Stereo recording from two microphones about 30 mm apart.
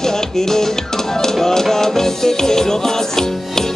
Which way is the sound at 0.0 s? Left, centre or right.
Centre.